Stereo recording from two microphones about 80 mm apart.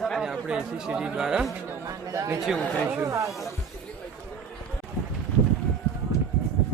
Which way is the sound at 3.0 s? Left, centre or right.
Right.